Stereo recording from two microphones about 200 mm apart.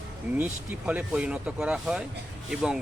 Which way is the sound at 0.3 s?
10° right (ahead or behind).